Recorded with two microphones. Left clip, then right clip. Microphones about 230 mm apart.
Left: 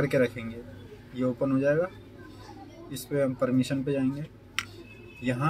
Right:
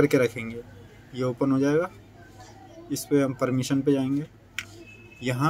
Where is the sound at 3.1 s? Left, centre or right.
Right.